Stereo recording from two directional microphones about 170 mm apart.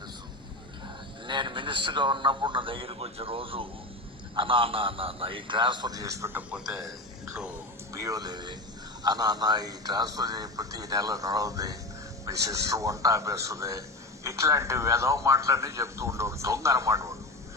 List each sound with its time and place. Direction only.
1.3 s speech: 30° right (ahead or behind); by 6.7 s 10° right (ahead or behind)
7.9 s a man's voice: 20° right (ahead or behind)